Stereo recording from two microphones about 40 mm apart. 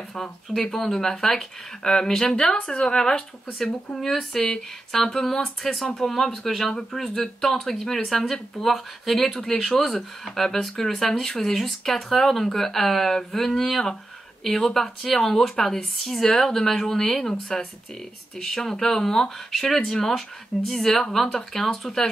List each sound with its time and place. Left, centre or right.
0.6 s speech: centre